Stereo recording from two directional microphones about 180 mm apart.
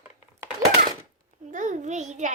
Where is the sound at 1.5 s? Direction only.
45° right (ahead or behind).